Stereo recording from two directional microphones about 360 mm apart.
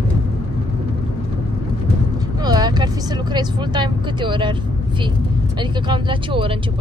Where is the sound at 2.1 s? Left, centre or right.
Centre.